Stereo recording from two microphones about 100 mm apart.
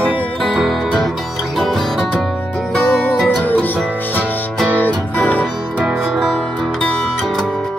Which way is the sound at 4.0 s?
20° left (ahead or behind).